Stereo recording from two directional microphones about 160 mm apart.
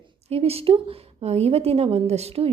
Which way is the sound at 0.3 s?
40° right (ahead or behind).